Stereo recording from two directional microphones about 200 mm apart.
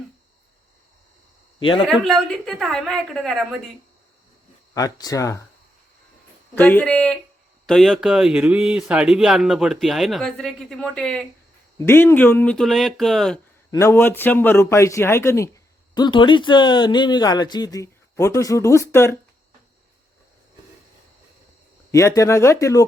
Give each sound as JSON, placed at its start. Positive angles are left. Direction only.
{"t": 1.9, "sound": "speech", "side_deg": 0}
{"t": 4.7, "sound": "a man's voice", "side_deg": 20}
{"t": 6.6, "sound": "a man's voice", "side_deg": 10}
{"t": 13.7, "sound": "a man's voice", "side_deg": 15}
{"t": 21.9, "sound": "a man's voice", "side_deg": 15}